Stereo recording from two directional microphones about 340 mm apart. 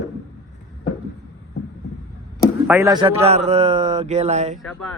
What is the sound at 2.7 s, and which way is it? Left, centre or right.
A man's voice, centre.